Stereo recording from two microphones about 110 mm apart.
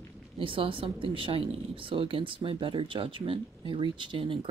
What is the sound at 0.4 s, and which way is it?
Speech, 50° right (ahead or behind).